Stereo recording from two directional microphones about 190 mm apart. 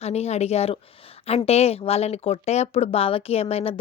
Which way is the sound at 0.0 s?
35° left (ahead or behind).